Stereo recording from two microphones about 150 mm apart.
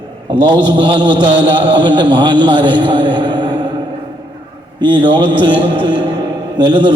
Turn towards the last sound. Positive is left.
turn(degrees=-30)  # may be behind; listen again after turning